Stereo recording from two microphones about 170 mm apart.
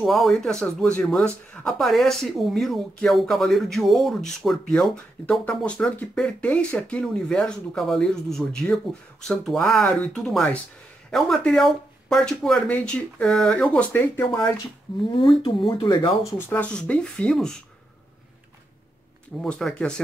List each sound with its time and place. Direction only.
0.0 s speech: centre (ahead or behind)
15.0 s speech: 30° left (ahead or behind)
16.3 s speech: 10° left (ahead or behind)
19.4 s speech: 5° left (ahead or behind)